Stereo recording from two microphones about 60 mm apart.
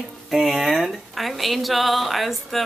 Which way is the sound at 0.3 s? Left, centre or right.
Centre.